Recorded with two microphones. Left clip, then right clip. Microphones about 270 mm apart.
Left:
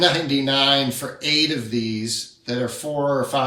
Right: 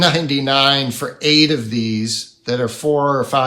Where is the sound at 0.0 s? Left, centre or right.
Centre.